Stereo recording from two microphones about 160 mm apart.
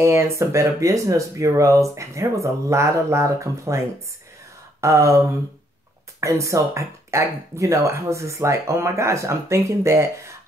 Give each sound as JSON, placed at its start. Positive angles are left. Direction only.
{"t": 0.0, "sound": "speech", "side_deg": -20}
{"t": 4.7, "sound": "a sound", "side_deg": -20}
{"t": 6.2, "sound": "speech", "side_deg": -20}